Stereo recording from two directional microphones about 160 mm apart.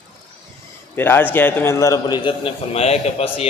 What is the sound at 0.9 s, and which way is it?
A man's voice, 15° left (ahead or behind).